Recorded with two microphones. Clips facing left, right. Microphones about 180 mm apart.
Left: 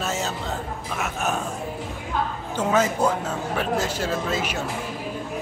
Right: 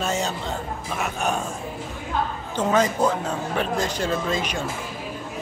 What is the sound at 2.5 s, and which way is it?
A man's voice, 10° left (ahead or behind).